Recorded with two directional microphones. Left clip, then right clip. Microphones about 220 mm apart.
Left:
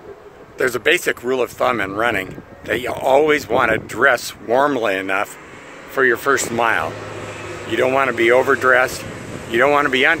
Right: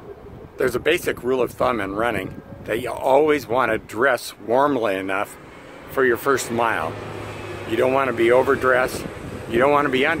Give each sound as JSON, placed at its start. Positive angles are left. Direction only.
{"t": 0.6, "sound": "speech", "side_deg": -5}
{"t": 7.2, "sound": "air conditioning", "side_deg": -45}
{"t": 7.7, "sound": "speech", "side_deg": -5}